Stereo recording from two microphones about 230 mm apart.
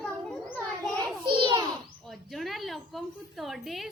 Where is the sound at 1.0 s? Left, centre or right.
Right.